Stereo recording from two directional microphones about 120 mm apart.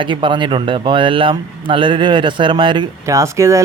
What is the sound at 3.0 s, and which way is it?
Speech, 25° right (ahead or behind).